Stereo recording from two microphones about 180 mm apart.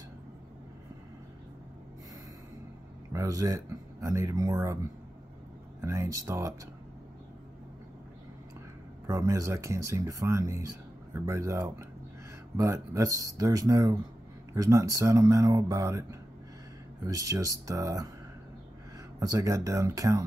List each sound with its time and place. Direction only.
3.1 s speech: 20° right (ahead or behind)
5.8 s speech: 20° right (ahead or behind)
9.0 s speech: 20° right (ahead or behind)
19.1 s speech: 20° right (ahead or behind)